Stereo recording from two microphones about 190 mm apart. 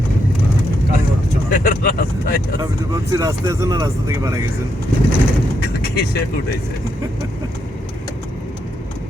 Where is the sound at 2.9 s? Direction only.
20° right (ahead or behind).